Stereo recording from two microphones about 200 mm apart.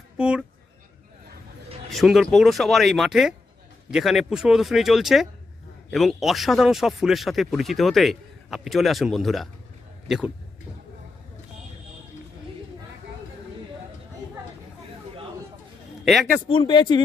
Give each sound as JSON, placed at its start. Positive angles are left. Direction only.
{"t": 0.2, "sound": "speech", "side_deg": -5}
{"t": 1.9, "sound": "speech", "side_deg": 0}
{"t": 16.1, "sound": "speech", "side_deg": 0}
{"t": 16.5, "sound": "speech", "side_deg": 25}